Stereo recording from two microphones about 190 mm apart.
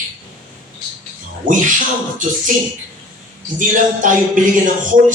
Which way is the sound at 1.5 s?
45° right (ahead or behind).